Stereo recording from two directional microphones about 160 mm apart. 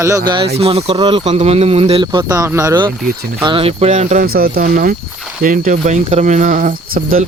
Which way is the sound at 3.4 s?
35° right (ahead or behind).